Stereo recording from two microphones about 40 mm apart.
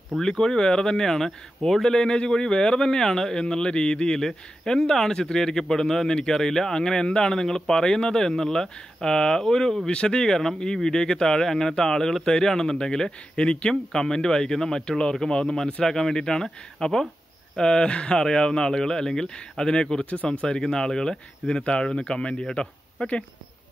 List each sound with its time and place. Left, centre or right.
0.2 s speech: centre